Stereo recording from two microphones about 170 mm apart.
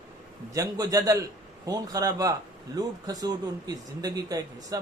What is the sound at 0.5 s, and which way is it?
A man's voice, 20° right (ahead or behind).